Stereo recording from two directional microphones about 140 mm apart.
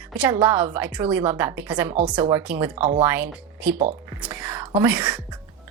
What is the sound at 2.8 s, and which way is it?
Speech, 50° right (ahead or behind).